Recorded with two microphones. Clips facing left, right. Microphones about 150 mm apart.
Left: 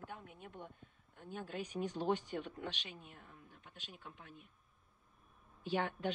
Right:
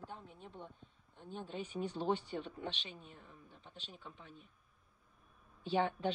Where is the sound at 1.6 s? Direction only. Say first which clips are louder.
Even; 40° left (ahead or behind).